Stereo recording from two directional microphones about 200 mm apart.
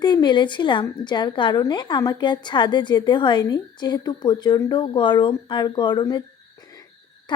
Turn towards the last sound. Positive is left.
turn(degrees=20)  # may be behind; listen again after turning